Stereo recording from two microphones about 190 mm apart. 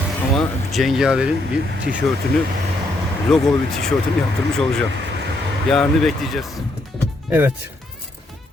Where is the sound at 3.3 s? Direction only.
Centre (ahead or behind).